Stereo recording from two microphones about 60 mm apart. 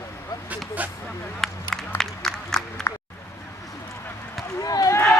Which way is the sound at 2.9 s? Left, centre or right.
Left.